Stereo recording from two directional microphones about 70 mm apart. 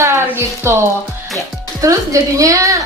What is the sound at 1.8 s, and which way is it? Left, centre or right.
Speech, right.